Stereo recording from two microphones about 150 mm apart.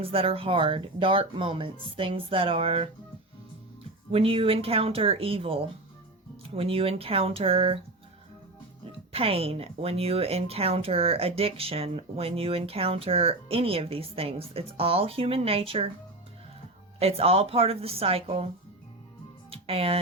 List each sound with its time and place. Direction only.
0.0 s speech: 40° right (ahead or behind)
4.1 s speech: 40° right (ahead or behind)
9.1 s speech: 40° right (ahead or behind)
17.0 s speech: 40° right (ahead or behind)
19.5 s music: 40° right (ahead or behind)